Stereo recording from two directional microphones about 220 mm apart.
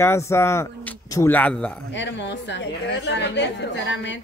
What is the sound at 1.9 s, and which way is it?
A woman's voice, 55° left (ahead or behind).